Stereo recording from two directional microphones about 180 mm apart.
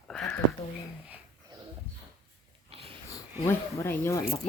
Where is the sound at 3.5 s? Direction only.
15° left (ahead or behind).